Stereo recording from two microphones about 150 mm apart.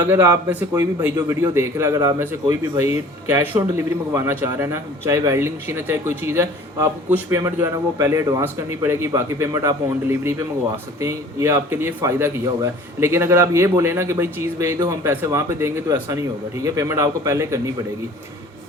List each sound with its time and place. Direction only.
0.0 s a man's voice: 15° right (ahead or behind)